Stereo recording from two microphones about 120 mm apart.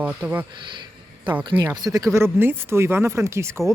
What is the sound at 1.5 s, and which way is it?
Speech, 15° right (ahead or behind).